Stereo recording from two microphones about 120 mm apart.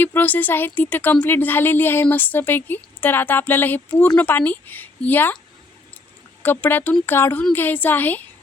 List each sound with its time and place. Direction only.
0.0 s speech: 15° left (ahead or behind)
6.4 s speech: 15° left (ahead or behind)